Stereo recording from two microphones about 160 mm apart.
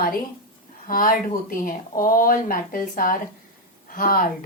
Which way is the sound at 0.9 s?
60° left (ahead or behind).